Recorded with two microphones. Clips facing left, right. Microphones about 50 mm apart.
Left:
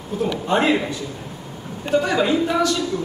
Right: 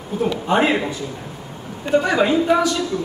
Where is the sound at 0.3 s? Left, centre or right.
Centre.